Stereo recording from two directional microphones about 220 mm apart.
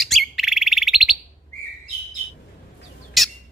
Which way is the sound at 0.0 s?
Centre (ahead or behind).